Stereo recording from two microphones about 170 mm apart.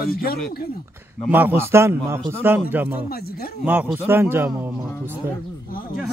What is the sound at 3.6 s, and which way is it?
A man's voice, 10° right (ahead or behind).